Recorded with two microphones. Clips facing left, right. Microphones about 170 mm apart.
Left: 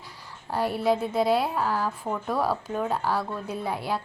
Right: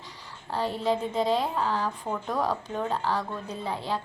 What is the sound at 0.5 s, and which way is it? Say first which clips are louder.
A woman's voice: left 3 dB; 10° left (ahead or behind).